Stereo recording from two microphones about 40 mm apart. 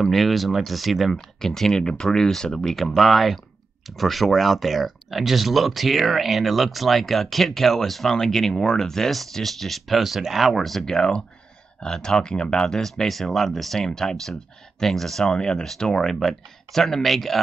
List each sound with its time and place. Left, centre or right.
0.0 s speech: centre
2.7 s speech: centre
11.0 s speech: centre